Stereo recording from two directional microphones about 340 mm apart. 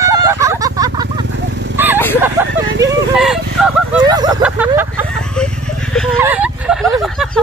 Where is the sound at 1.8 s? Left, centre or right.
Centre.